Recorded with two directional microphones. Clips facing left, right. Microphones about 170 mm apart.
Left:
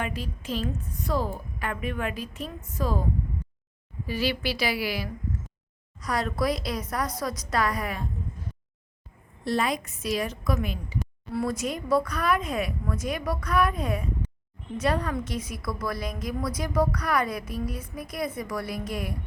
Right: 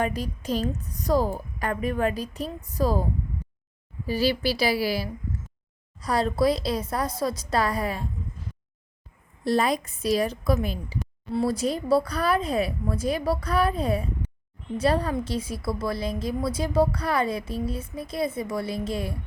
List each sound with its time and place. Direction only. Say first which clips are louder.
0.0 s a woman's voice: right 5 dB; 40° right (ahead or behind)
9.4 s a woman's voice: right 3 dB; 35° right (ahead or behind)